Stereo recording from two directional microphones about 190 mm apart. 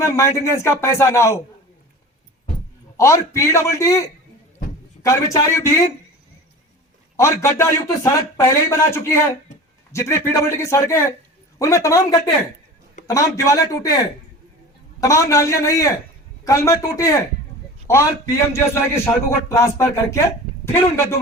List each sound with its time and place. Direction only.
0.0 s a man's voice: 15° left (ahead or behind)
3.0 s a man's voice: 15° left (ahead or behind)
7.2 s a man's voice: 15° left (ahead or behind)
15.0 s a man's voice: 15° left (ahead or behind)